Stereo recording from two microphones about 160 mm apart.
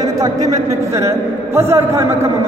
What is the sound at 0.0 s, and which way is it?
A man's voice, 25° right (ahead or behind).